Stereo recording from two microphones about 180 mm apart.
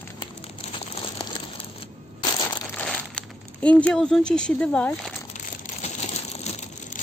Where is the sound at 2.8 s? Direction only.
5° left (ahead or behind).